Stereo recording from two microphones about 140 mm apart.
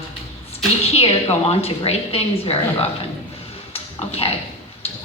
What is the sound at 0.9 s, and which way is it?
A woman's voice, 45° left (ahead or behind).